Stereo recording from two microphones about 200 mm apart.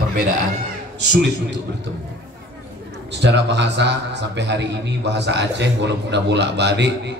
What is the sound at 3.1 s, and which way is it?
A man's voice, 60° right (ahead or behind).